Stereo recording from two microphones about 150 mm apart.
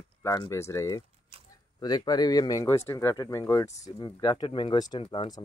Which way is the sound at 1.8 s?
25° left (ahead or behind).